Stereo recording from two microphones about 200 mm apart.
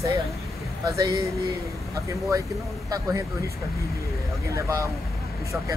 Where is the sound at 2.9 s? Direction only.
15° right (ahead or behind).